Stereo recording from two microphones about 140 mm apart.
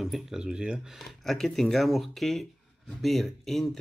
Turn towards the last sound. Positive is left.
turn(degrees=0)  # may be behind; listen again after turning